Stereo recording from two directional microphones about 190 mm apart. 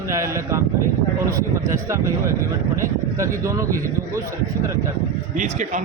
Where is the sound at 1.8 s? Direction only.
15° right (ahead or behind).